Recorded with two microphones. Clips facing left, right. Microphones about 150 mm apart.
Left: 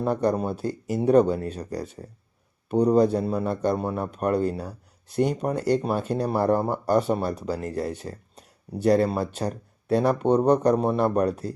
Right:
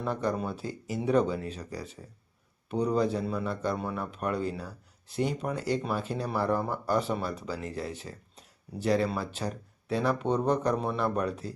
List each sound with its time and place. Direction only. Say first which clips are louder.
0.0 s speech: left 7 dB; 45° left (ahead or behind)